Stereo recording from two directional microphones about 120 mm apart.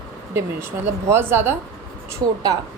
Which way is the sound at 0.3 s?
20° right (ahead or behind).